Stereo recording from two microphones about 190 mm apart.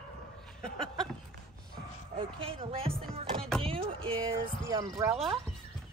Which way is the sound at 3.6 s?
30° right (ahead or behind).